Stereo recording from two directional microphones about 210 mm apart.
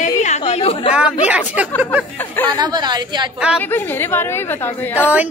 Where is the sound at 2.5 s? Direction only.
20° right (ahead or behind).